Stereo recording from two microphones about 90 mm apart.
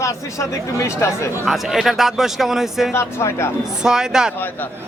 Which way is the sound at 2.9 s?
30° left (ahead or behind).